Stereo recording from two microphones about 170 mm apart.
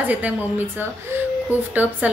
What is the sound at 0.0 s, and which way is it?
Speech, 10° right (ahead or behind).